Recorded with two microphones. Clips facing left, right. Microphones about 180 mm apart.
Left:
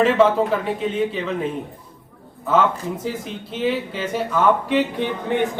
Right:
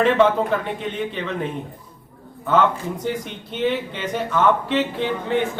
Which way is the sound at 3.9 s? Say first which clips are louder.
Left 1 dB; 5° left (ahead or behind).